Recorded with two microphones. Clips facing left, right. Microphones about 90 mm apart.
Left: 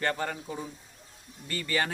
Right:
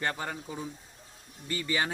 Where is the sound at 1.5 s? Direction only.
15° right (ahead or behind).